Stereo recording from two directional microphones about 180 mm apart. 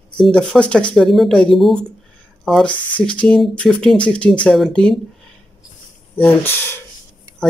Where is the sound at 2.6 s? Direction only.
25° left (ahead or behind).